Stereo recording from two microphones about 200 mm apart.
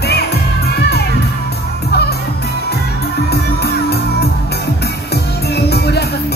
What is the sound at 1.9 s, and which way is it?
Music, 55° left (ahead or behind).